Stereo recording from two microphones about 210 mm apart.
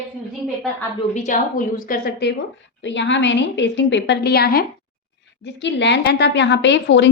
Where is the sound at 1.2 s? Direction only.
40° left (ahead or behind).